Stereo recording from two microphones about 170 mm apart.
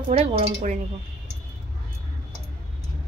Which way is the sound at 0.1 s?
35° right (ahead or behind).